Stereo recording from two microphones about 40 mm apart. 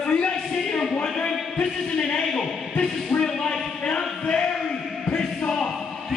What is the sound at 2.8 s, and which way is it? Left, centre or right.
Speech, left.